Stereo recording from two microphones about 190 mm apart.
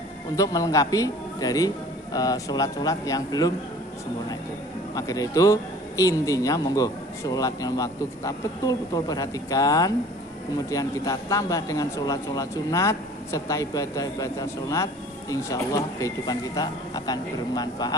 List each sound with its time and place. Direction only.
0.4 s speech: 20° left (ahead or behind)
4.9 s a man's voice: 20° left (ahead or behind)